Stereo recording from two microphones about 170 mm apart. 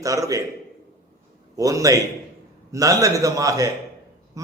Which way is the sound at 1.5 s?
20° right (ahead or behind).